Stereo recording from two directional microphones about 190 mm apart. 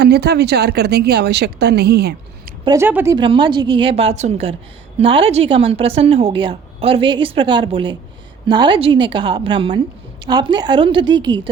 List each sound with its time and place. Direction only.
0.0 s a woman's voice: 60° right (ahead or behind)
2.6 s speech: 10° right (ahead or behind)
3.2 s a woman's voice: 25° right (ahead or behind)